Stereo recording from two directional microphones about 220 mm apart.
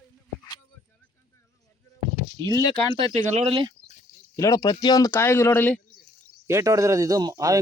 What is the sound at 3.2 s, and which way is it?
Speech, 30° right (ahead or behind).